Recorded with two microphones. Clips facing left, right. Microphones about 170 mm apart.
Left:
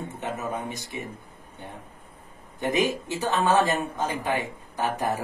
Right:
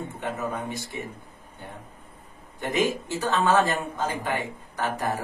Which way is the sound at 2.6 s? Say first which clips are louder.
Left 1 dB; 20° left (ahead or behind).